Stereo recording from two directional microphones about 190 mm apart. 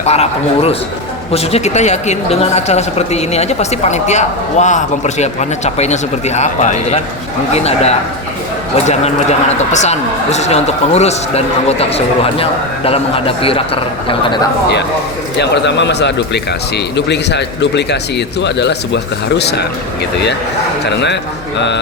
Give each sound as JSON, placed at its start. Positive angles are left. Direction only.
{"t": 0.0, "sound": "speech", "side_deg": 35}
{"t": 15.4, "sound": "speech", "side_deg": 65}